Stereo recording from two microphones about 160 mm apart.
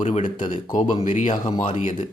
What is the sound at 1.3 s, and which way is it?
Speech, 30° left (ahead or behind).